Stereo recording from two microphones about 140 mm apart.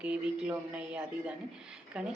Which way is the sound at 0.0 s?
10° right (ahead or behind).